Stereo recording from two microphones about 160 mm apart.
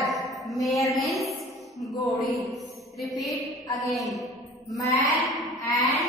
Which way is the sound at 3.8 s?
Centre (ahead or behind).